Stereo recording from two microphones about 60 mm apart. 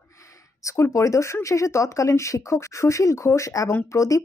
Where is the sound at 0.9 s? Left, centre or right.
Left.